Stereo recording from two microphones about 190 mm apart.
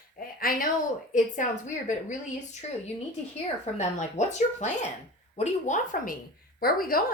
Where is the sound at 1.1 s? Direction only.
40° left (ahead or behind).